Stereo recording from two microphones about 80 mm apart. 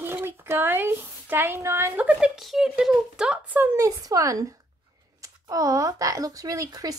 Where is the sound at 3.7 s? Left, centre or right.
Right.